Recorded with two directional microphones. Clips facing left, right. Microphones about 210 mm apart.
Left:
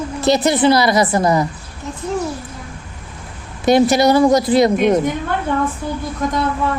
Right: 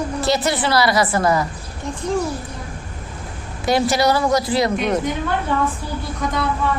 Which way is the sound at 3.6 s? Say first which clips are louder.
Left 5 dB; 20° left (ahead or behind).